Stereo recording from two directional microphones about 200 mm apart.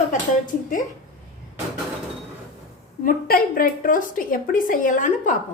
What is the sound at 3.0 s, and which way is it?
A woman's voice, 45° left (ahead or behind).